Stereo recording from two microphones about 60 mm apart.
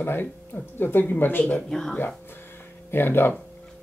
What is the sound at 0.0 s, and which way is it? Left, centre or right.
Speech, left.